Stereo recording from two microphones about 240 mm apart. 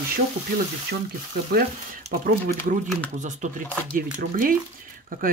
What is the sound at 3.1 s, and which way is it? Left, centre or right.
Speech, right.